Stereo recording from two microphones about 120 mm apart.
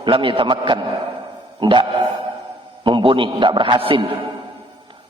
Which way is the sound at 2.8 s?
45° right (ahead or behind).